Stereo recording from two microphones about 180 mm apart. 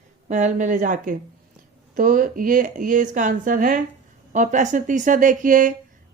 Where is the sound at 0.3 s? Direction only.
40° right (ahead or behind).